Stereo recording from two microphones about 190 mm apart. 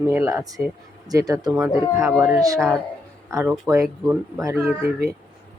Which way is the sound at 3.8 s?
Centre (ahead or behind).